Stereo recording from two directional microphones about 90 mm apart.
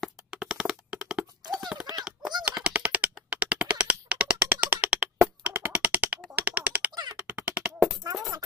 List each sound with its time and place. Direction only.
0.0 s a sound: 5° right (ahead or behind)
7.2 s beatboxing: 15° right (ahead or behind)
8.0 s music: 40° right (ahead or behind)